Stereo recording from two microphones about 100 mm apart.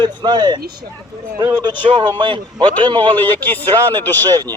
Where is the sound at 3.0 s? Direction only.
15° left (ahead or behind).